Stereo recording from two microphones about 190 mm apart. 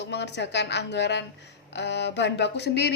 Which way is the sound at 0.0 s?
65° left (ahead or behind).